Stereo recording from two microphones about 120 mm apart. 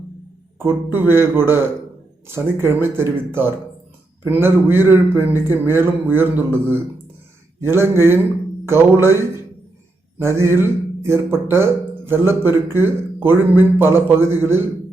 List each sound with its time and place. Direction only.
0.6 s speech: 20° right (ahead or behind)